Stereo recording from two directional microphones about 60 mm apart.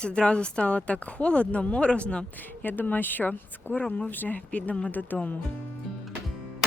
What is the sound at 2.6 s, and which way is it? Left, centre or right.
Speech, left.